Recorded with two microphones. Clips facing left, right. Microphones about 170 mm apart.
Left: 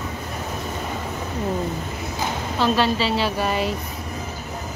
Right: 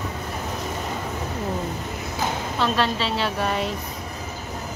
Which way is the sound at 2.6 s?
Centre (ahead or behind).